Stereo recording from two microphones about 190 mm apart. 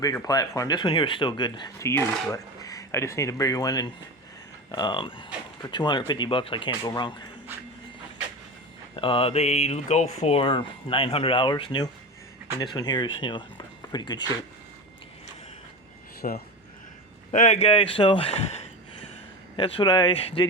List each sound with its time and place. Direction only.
0.0 s speech: 20° left (ahead or behind)
9.0 s speech: 30° left (ahead or behind)
16.2 s speech: 45° left (ahead or behind)